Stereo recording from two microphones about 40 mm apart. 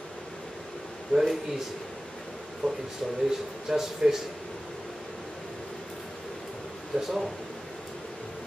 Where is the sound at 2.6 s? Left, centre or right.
Centre.